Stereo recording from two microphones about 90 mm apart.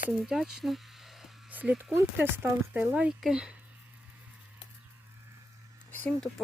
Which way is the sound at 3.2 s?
10° right (ahead or behind).